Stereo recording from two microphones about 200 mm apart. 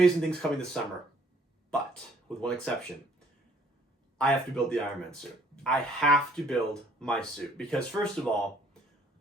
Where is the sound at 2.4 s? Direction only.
5° left (ahead or behind).